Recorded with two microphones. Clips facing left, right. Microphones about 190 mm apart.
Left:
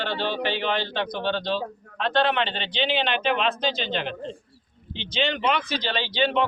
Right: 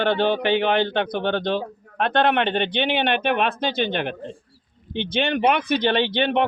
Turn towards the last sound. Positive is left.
turn(degrees=-60)  # may be behind; listen again after turning